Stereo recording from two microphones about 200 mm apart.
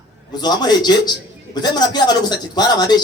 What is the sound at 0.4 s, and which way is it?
Speech, 20° left (ahead or behind).